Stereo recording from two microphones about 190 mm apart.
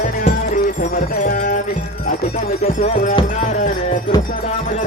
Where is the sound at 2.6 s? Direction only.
35° left (ahead or behind).